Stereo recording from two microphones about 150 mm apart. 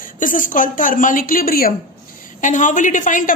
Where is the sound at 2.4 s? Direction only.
60° left (ahead or behind).